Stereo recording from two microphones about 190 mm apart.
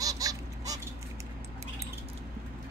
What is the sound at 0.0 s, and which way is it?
Honk, 20° right (ahead or behind).